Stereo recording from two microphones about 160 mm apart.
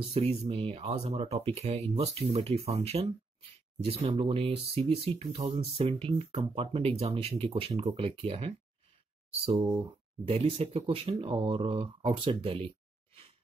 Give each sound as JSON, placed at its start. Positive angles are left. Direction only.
{"t": 0.1, "sound": "speech", "side_deg": -40}